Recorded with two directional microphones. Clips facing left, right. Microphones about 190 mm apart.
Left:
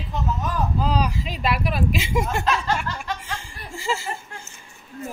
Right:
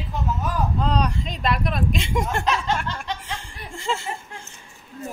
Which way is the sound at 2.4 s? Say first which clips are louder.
Even; 20° right (ahead or behind).